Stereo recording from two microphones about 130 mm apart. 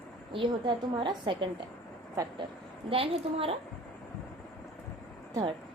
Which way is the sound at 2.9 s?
45° right (ahead or behind).